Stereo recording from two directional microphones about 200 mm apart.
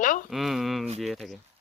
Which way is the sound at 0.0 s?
40° left (ahead or behind).